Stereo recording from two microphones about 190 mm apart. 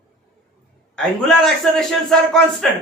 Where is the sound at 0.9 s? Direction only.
Centre (ahead or behind).